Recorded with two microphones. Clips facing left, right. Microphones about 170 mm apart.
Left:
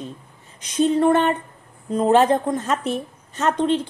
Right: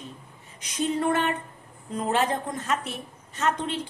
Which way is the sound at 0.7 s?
30° left (ahead or behind).